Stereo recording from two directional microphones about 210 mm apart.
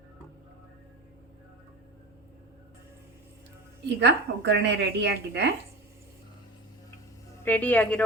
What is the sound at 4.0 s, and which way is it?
A woman's voice, 55° right (ahead or behind).